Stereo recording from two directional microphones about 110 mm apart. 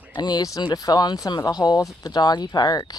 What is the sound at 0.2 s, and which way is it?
Speech, 40° left (ahead or behind).